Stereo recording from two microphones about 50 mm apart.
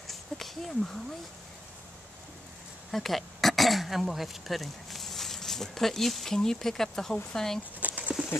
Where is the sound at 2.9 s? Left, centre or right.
Centre.